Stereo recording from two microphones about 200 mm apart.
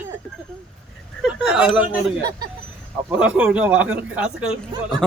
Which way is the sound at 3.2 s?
5° right (ahead or behind).